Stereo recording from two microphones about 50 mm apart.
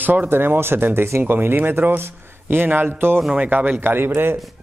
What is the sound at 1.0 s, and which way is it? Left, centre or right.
Speech, right.